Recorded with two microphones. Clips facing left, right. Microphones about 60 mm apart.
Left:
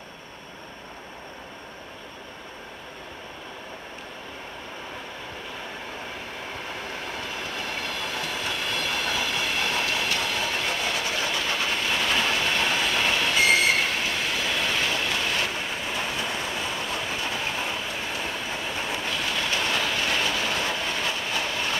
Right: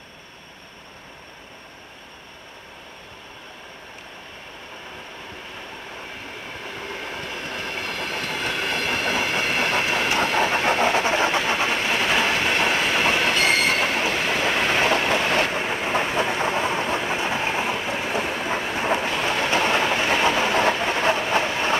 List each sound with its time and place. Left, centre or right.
7.4 s train: right
10.1 s vehicle: right
20.6 s train: right